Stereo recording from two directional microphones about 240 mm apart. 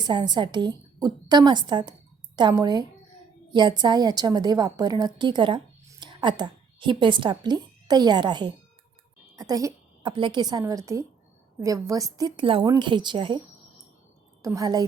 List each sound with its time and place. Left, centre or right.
0.0 s a woman's voice: centre
14.4 s a woman's voice: centre